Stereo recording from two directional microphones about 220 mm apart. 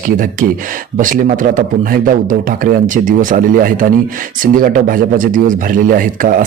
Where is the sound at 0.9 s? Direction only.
35° right (ahead or behind).